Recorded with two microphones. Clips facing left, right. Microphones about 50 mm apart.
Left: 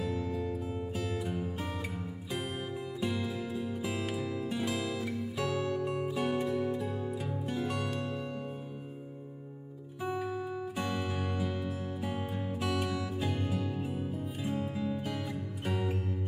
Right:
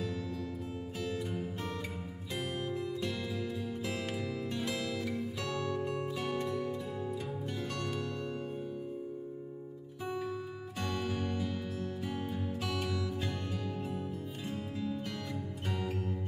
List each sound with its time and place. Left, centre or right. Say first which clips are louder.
0.0 s music: left 4 dB; centre
0.9 s music: even; centre
10.0 s music: left 3 dB; centre